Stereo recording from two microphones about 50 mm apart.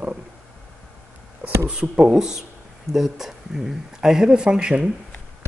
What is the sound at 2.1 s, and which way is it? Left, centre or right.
Speech, centre.